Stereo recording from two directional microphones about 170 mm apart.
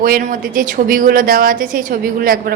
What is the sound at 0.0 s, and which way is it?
A woman's voice, 60° right (ahead or behind).